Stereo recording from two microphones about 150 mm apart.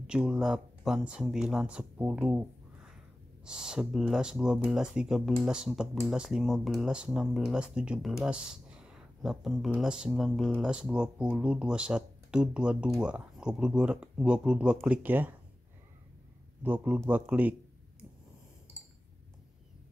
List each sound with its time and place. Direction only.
0.0 s speech: 5° right (ahead or behind)
16.6 s speech: 10° right (ahead or behind)